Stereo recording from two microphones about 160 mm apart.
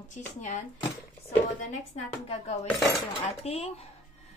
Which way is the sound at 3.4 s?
40° left (ahead or behind).